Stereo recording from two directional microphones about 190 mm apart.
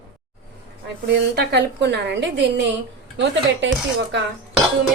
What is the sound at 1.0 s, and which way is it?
A woman's voice, 65° right (ahead or behind).